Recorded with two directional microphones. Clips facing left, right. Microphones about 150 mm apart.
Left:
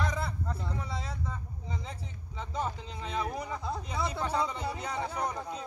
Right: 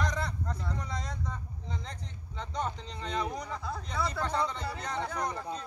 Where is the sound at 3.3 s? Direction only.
5° left (ahead or behind).